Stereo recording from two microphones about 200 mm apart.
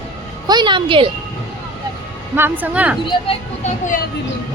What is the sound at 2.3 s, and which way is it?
Speech, 10° right (ahead or behind).